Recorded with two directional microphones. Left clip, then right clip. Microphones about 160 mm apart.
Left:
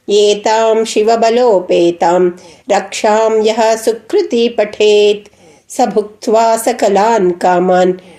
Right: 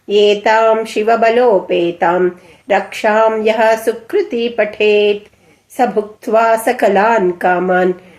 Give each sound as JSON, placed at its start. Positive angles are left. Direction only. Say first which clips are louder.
{"t": 0.1, "sound": "a woman's voice", "louder": "left 1 dB", "side_deg": 35}